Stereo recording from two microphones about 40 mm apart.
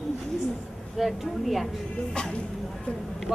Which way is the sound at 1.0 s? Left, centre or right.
Centre.